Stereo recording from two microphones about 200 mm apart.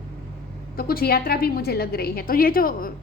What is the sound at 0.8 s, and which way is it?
A woman's voice, 50° left (ahead or behind).